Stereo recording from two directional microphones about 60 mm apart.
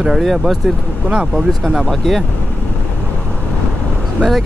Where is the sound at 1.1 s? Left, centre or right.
Centre.